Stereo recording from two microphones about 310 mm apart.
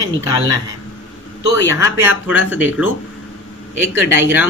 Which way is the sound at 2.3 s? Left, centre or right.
Left.